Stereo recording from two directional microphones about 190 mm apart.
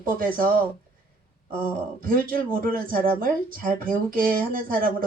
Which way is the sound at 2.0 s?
50° right (ahead or behind).